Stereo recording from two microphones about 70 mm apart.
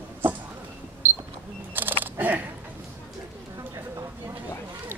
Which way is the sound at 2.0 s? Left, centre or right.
Right.